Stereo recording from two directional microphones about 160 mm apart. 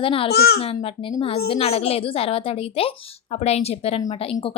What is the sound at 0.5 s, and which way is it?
A woman's voice, 35° left (ahead or behind).